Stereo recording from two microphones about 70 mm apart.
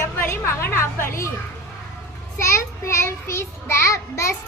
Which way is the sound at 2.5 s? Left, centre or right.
Left.